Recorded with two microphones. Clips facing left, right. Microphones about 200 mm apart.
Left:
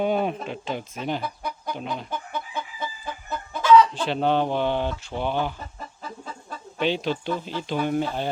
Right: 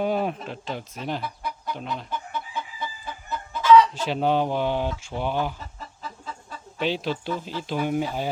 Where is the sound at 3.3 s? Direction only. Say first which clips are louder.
Right 1 dB; 50° left (ahead or behind).